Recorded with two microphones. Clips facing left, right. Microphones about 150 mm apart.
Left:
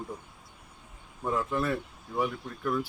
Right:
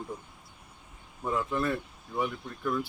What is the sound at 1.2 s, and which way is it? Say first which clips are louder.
Speech: even; centre (ahead or behind).